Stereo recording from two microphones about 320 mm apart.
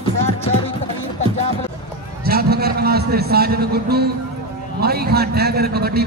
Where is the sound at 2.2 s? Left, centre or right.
Right.